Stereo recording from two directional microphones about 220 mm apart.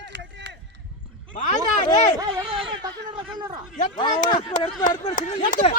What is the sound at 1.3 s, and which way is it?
Speech, 35° left (ahead or behind).